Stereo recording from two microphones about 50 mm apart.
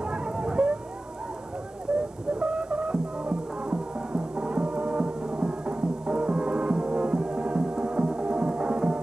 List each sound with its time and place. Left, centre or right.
0.0 s vehicle: centre
1.9 s a sound: centre
2.3 s music: right